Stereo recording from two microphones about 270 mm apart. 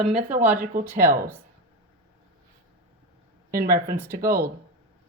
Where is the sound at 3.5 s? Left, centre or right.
Right.